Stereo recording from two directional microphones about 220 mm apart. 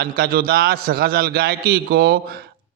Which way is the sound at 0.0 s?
40° right (ahead or behind).